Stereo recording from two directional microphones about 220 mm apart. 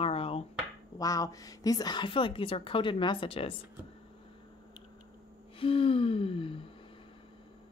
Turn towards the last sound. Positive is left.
turn(degrees=25)  # may be behind; listen again after turning